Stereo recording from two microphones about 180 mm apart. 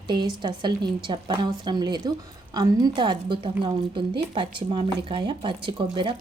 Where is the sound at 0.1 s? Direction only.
25° right (ahead or behind).